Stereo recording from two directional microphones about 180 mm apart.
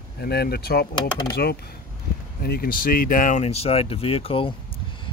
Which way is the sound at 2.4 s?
60° left (ahead or behind).